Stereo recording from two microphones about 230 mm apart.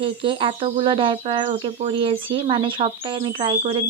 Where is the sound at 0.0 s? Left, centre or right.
Right.